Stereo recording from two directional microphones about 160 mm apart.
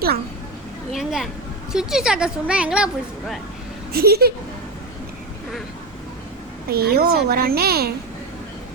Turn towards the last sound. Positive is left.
turn(degrees=-75)  # may be behind; listen again after turning